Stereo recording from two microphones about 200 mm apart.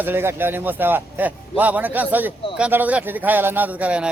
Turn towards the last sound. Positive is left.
turn(degrees=-5)  # may be behind; listen again after turning